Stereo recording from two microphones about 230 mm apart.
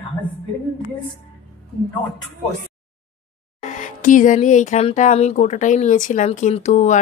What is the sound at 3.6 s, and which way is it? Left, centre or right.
Speech, left.